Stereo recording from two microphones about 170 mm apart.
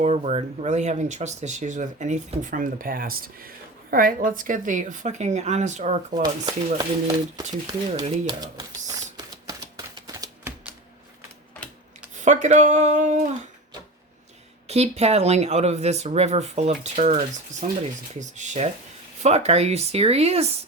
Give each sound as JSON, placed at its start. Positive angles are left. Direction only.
{"t": 0.0, "sound": "speech", "side_deg": -40}
{"t": 6.4, "sound": "speech", "side_deg": -25}
{"t": 8.0, "sound": "speech", "side_deg": -35}
{"t": 8.4, "sound": "a sound", "side_deg": -20}
{"t": 12.1, "sound": "speech", "side_deg": -45}
{"t": 14.7, "sound": "speech", "side_deg": -40}